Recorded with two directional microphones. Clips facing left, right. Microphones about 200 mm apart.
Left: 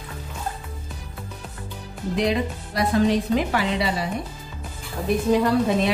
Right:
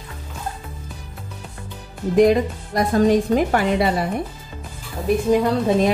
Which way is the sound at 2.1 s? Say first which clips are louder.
Right 8 dB; 45° right (ahead or behind).